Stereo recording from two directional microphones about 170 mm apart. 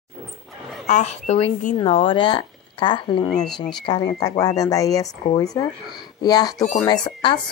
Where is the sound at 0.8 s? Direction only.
40° left (ahead or behind).